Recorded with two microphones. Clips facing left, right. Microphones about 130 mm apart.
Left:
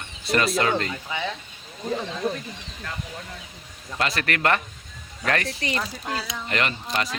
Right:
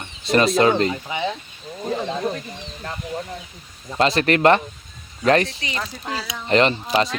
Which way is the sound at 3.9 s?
25° right (ahead or behind).